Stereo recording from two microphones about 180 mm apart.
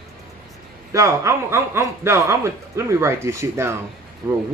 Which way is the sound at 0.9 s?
15° right (ahead or behind).